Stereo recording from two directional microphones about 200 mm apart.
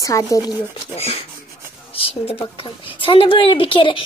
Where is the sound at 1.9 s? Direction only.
30° left (ahead or behind).